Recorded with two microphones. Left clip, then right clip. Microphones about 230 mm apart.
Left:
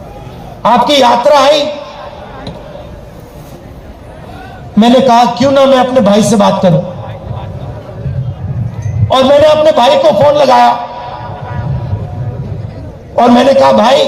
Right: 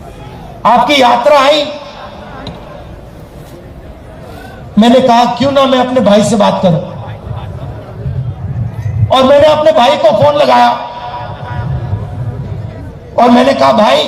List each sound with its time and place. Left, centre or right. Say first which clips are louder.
0.6 s a man's voice: even; left
4.8 s a man's voice: left 1 dB; left
9.0 s a man's voice: even; left
13.1 s a man's voice: left 1 dB; left